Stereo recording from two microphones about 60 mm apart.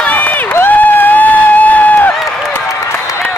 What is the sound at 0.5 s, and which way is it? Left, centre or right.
Crowd, left.